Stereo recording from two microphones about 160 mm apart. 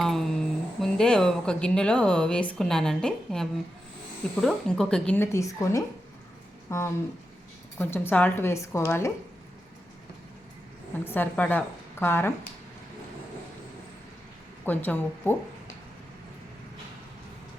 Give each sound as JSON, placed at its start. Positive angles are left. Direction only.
{"t": 0.0, "sound": "a sound", "side_deg": 0}
{"t": 0.8, "sound": "a woman's voice", "side_deg": 5}
{"t": 11.0, "sound": "a woman's voice", "side_deg": 10}
{"t": 14.6, "sound": "a woman's voice", "side_deg": 10}